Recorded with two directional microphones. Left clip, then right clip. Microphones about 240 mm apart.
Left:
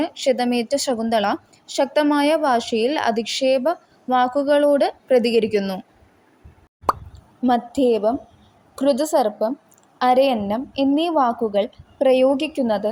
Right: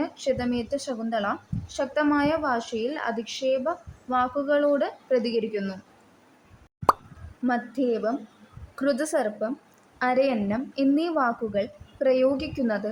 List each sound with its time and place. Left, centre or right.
0.0 s a woman's voice: centre
7.4 s a woman's voice: centre